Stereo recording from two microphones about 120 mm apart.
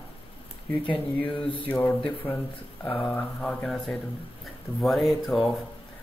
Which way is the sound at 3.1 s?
5° left (ahead or behind).